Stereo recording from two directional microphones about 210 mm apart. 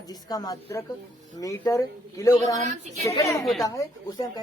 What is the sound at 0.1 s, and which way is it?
A woman's voice, 20° left (ahead or behind).